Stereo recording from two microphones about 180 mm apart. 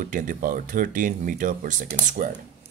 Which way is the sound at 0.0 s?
50° right (ahead or behind).